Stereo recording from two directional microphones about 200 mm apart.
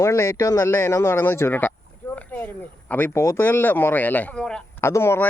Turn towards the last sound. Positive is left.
turn(degrees=15)  # may be behind; listen again after turning